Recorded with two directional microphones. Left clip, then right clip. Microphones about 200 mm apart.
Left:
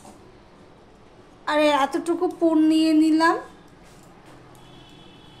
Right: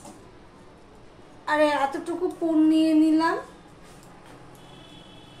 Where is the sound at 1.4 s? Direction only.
55° left (ahead or behind).